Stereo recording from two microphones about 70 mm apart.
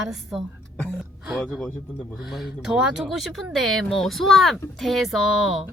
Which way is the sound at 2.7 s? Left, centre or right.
Centre.